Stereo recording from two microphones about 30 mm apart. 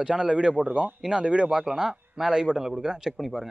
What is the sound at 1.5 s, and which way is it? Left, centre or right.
Speech, centre.